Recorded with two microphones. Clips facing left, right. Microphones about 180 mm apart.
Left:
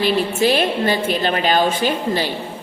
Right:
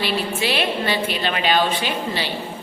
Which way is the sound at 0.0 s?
45° left (ahead or behind).